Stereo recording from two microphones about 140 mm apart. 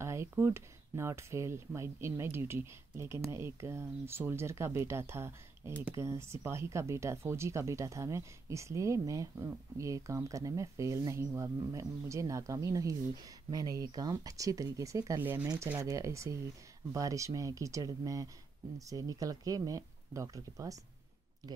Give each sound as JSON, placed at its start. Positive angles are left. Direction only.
{"t": 0.0, "sound": "speech", "side_deg": -20}